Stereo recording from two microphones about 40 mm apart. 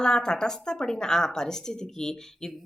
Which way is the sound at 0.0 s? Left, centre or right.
Centre.